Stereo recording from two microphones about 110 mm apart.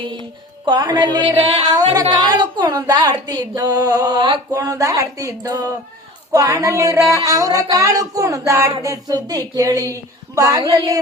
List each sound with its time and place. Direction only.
0.6 s a woman's voice: 40° right (ahead or behind)